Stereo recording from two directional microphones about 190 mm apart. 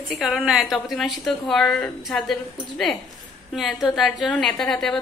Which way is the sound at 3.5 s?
Centre (ahead or behind).